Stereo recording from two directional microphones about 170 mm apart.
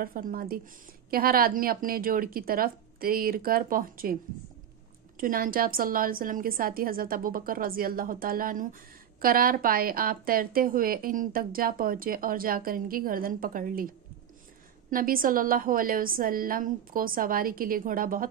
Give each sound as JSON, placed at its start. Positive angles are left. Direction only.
{"t": 0.0, "sound": "a woman's voice", "side_deg": -55}
{"t": 14.9, "sound": "a woman's voice", "side_deg": -55}